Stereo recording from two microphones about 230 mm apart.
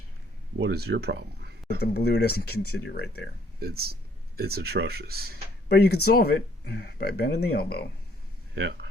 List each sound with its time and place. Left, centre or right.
0.6 s speech: right
1.8 s speech: left
3.6 s speech: right
5.6 s speech: left
8.5 s speech: right